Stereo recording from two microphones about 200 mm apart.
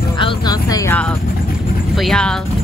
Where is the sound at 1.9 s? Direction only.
Centre (ahead or behind).